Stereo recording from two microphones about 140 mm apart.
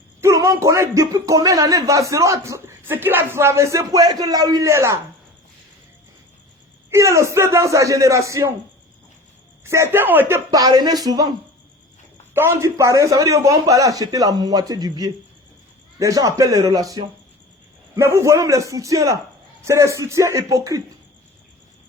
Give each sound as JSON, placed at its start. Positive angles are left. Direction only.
{"t": 0.2, "sound": "speech", "side_deg": -20}
{"t": 6.9, "sound": "speech", "side_deg": -20}
{"t": 9.6, "sound": "speech", "side_deg": -20}